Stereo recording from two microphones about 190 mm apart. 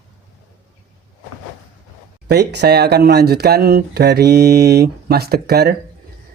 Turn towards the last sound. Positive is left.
turn(degrees=-55)  # may be behind; listen again after turning